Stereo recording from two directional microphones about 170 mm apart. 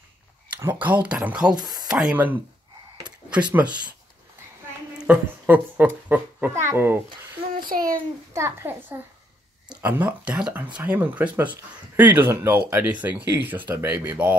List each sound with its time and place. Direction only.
0.6 s speech: 10° right (ahead or behind)
1.5 s speech: 25° right (ahead or behind)
1.9 s speech: 5° right (ahead or behind)
4.9 s speech: 10° right (ahead or behind)
7.6 s a child's voice: 55° right (ahead or behind)
8.3 s speech: 15° right (ahead or behind)